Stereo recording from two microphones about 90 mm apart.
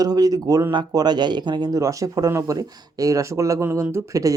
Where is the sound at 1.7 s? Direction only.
35° right (ahead or behind).